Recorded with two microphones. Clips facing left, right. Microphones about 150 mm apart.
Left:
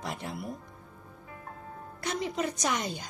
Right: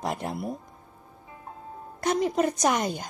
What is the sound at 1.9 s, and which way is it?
Speech, 50° right (ahead or behind).